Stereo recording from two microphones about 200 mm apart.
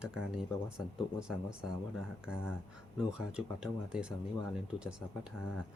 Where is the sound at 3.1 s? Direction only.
5° right (ahead or behind).